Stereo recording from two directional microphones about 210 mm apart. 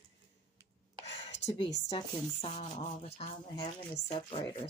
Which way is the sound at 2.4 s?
30° left (ahead or behind).